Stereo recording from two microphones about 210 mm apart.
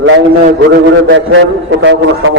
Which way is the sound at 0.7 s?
60° right (ahead or behind).